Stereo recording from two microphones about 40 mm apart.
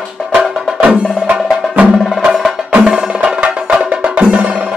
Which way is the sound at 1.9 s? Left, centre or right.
Centre.